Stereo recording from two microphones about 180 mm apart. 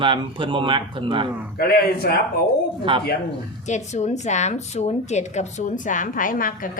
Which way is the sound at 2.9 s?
25° right (ahead or behind).